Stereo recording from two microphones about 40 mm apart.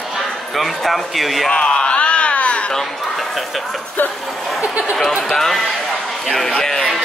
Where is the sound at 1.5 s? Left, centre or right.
Left.